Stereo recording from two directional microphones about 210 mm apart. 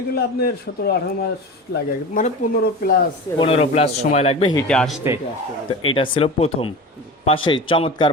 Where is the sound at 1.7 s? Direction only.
40° left (ahead or behind).